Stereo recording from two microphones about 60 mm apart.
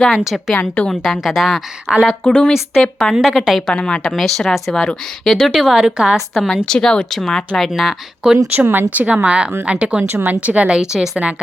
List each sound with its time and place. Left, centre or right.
0.1 s a woman's voice: centre
1.9 s speech: centre
2.2 s speech: centre
2.8 s a woman's voice: centre
3.7 s speech: centre
4.0 s a woman's voice: centre
6.7 s speech: centre
7.7 s speech: centre
8.5 s speech: right
9.0 s a woman's voice: right
10.1 s a woman's voice: right
10.8 s speech: centre